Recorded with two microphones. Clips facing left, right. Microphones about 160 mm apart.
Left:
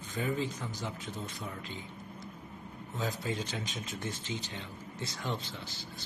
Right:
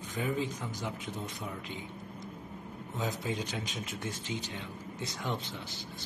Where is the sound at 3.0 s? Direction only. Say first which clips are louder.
Even; 20° right (ahead or behind).